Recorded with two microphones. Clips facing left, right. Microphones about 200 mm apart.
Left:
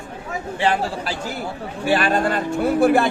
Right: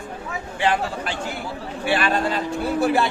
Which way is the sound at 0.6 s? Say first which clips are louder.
Left 1 dB; 35° left (ahead or behind).